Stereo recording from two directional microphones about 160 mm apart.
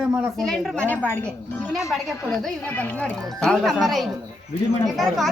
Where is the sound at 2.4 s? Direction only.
10° left (ahead or behind).